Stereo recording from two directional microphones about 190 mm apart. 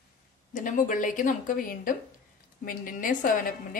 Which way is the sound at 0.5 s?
45° left (ahead or behind).